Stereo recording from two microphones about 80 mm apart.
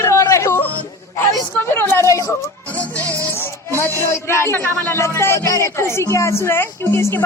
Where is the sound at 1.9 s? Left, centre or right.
Left.